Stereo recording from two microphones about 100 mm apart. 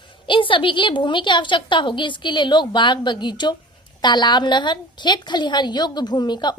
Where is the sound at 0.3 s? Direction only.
55° left (ahead or behind).